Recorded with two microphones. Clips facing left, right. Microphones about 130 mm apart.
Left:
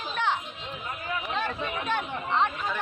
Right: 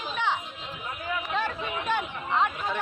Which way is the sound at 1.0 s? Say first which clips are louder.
Right 2 dB; 10° right (ahead or behind).